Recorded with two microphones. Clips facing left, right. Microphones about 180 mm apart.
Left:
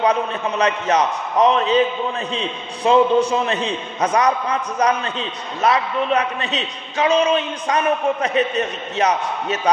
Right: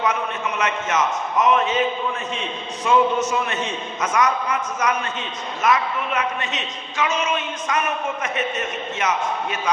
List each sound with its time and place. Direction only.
0.0 s a man's voice: 35° left (ahead or behind)